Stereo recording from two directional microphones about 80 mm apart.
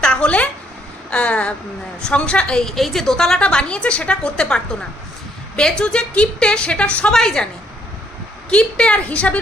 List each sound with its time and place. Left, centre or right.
0.0 s a sound: centre
1.1 s a woman's voice: centre
8.4 s a woman's voice: centre